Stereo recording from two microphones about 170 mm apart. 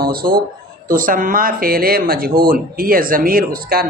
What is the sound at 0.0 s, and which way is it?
A man's voice, 60° right (ahead or behind).